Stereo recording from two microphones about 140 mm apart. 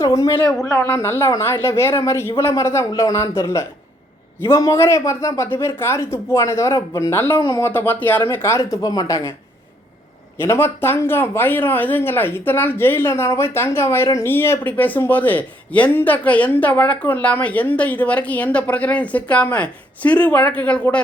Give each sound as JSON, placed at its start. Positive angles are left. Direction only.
{"t": 0.0, "sound": "speech", "side_deg": 25}
{"t": 0.3, "sound": "speech", "side_deg": 15}
{"t": 10.3, "sound": "speech", "side_deg": 15}